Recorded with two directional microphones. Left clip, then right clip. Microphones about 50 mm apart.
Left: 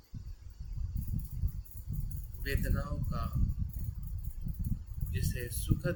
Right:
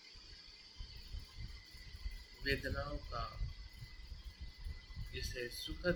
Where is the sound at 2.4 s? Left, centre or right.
Left.